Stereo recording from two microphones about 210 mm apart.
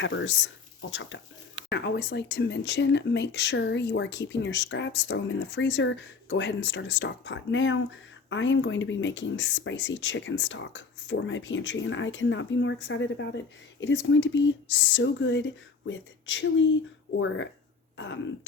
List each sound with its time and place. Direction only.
0.0 s speech: 60° left (ahead or behind)
1.7 s speech: 50° left (ahead or behind)